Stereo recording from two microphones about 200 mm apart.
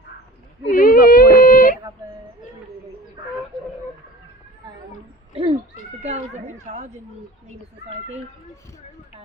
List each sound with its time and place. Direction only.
0.7 s whimper: 45° left (ahead or behind)
5.3 s cat: 30° right (ahead or behind)
6.0 s speech: 35° right (ahead or behind)